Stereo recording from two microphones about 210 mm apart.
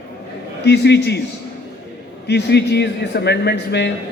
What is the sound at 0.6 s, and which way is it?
Speech, 50° left (ahead or behind).